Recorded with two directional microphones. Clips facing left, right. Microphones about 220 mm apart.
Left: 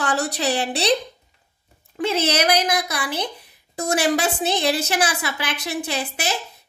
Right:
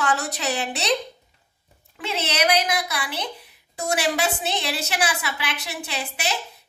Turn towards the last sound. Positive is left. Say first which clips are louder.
# left 4 dB
turn(degrees=45)  # may be behind; listen again after turning